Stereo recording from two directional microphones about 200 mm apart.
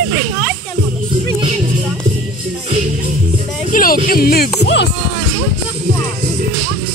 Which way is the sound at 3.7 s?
45° left (ahead or behind).